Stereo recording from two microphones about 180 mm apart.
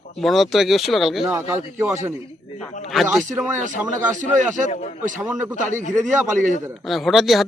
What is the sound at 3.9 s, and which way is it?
Speech, 45° right (ahead or behind).